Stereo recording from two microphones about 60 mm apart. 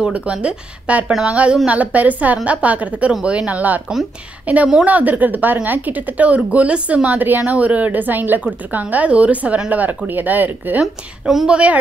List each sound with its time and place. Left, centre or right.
0.0 s a woman's voice: centre
10.8 s a woman's voice: centre
11.4 s a woman's voice: right